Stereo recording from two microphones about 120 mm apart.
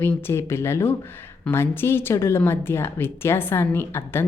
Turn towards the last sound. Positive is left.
turn(degrees=20)  # may be behind; listen again after turning